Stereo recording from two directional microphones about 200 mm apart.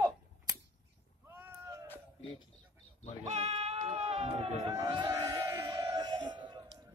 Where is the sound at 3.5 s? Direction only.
25° right (ahead or behind).